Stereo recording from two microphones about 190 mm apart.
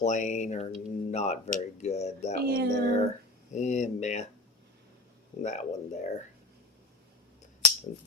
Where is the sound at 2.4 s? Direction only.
55° right (ahead or behind).